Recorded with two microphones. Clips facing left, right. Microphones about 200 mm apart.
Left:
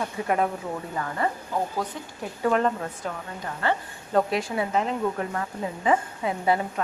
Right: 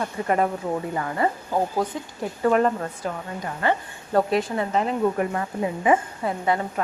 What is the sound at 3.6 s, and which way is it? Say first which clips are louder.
Speech: right 3 dB; 15° right (ahead or behind).